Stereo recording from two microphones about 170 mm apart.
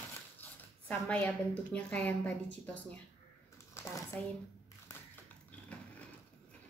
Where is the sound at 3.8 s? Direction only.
15° left (ahead or behind).